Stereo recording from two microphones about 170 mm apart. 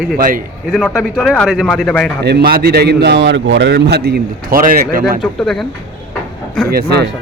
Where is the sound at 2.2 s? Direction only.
65° right (ahead or behind).